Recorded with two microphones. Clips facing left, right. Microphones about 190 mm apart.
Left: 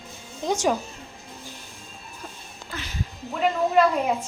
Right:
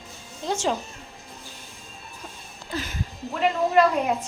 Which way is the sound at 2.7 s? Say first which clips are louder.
Right 5 dB; 45° right (ahead or behind).